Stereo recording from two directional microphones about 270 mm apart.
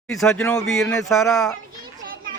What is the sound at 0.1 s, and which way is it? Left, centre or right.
Speech, centre.